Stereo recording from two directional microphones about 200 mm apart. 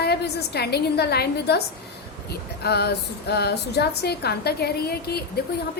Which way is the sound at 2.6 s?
55° left (ahead or behind).